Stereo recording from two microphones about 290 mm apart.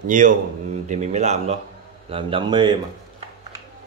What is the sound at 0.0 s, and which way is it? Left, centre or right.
A man's voice, right.